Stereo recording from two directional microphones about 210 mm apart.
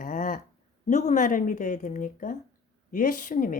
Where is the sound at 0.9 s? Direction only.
35° left (ahead or behind).